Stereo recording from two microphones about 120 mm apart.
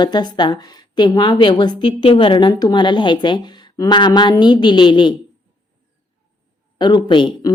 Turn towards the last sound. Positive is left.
turn(degrees=40)  # may be behind; listen again after turning